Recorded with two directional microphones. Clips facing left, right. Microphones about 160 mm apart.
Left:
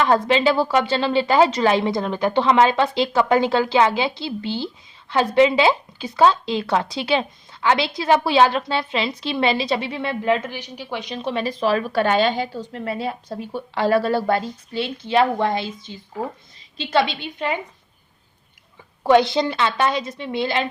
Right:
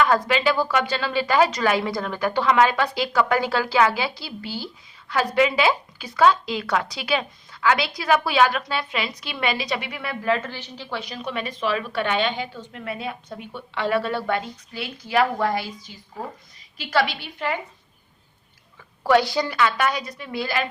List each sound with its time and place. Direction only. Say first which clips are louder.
0.0 s a woman's voice: left 3 dB; 25° left (ahead or behind)
19.0 s speech: left 3 dB; 20° left (ahead or behind)